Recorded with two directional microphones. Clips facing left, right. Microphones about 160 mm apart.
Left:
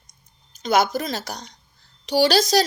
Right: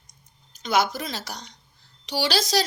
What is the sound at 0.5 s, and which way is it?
A woman's voice, 45° left (ahead or behind).